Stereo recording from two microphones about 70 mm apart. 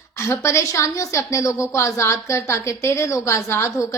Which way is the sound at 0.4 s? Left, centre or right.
Left.